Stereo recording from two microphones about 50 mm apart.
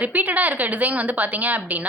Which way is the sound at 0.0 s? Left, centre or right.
Right.